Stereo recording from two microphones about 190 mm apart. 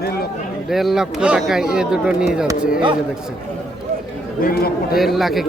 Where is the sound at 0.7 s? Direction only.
Centre (ahead or behind).